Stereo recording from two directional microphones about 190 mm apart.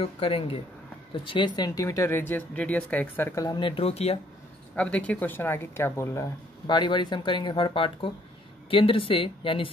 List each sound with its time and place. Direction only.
0.0 s speech: 30° left (ahead or behind)
4.7 s speech: 5° left (ahead or behind)
6.7 s speech: 25° left (ahead or behind)